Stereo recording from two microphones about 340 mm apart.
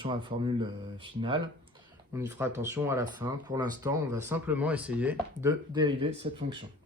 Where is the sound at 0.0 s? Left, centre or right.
Centre.